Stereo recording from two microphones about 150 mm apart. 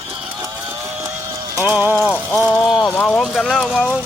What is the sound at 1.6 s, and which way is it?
Mechanisms, 10° right (ahead or behind).